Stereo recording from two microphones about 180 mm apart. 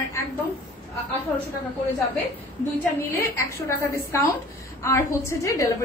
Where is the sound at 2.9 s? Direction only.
15° left (ahead or behind).